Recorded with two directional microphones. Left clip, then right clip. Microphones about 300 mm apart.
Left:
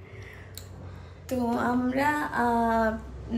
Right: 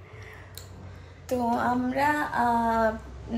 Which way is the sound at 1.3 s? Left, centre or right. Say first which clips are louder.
Right 2 dB; centre.